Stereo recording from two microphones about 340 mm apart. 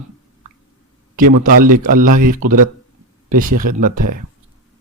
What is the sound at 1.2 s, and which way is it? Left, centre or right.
A man's voice, right.